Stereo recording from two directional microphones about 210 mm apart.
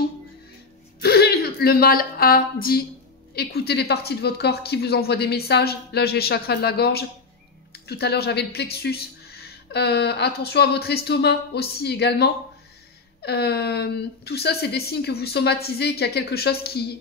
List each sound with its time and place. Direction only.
1.0 s a woman's voice: 50° left (ahead or behind)